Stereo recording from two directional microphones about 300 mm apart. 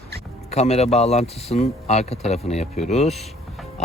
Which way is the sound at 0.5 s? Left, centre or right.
Left.